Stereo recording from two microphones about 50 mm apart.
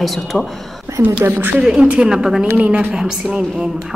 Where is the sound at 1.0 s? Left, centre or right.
Right.